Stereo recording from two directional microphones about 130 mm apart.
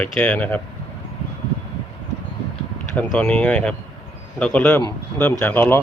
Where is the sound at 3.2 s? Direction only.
10° left (ahead or behind).